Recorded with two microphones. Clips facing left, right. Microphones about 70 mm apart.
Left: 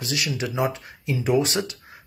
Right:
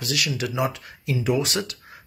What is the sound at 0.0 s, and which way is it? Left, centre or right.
Speech, left.